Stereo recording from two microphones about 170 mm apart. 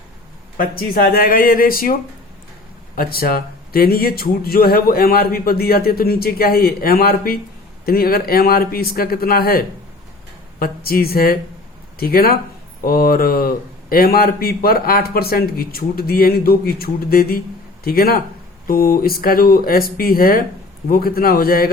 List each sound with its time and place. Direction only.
0.5 s speech: 55° left (ahead or behind)